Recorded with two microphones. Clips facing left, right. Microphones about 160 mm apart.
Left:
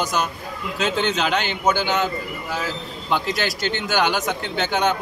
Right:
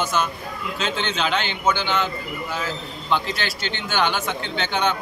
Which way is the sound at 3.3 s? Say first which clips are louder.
Left 5 dB; 45° left (ahead or behind).